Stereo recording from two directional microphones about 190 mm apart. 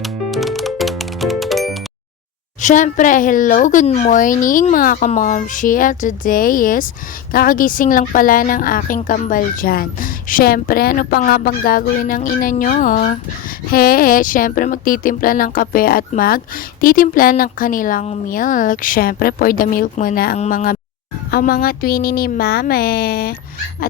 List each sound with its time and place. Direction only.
0.0 s music: centre (ahead or behind)
2.6 s a woman's voice: 40° left (ahead or behind)